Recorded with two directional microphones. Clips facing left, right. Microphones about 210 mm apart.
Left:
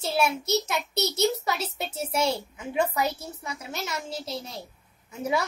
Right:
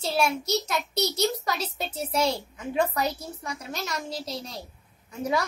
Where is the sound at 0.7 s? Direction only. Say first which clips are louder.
Right 1 dB; 25° left (ahead or behind).